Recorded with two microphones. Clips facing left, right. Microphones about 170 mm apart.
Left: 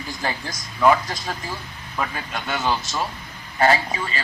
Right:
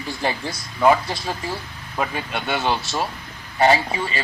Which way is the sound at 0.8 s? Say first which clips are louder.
Right 1 dB; 25° right (ahead or behind).